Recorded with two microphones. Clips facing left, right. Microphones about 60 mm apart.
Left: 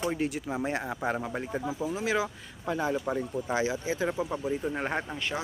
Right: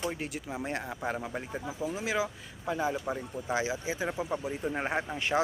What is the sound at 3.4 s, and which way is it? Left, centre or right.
Speech, centre.